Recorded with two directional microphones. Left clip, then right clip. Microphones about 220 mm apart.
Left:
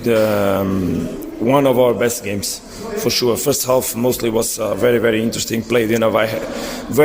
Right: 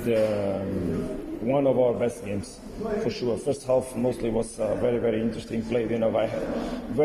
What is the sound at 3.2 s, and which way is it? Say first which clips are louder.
A man's voice: left 10 dB; 50° left (ahead or behind).